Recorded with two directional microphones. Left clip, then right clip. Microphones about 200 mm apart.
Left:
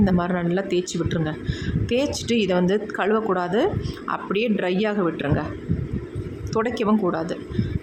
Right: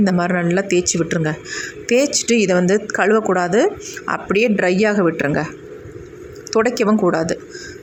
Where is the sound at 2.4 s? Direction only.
20° right (ahead or behind).